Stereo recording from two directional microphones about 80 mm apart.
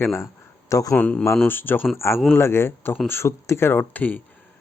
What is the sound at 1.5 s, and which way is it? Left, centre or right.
Speech, left.